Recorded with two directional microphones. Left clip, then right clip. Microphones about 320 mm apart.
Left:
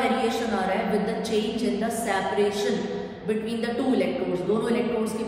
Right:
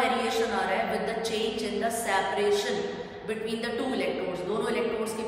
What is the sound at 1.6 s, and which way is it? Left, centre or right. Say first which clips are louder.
A woman's voice: left 2 dB; centre.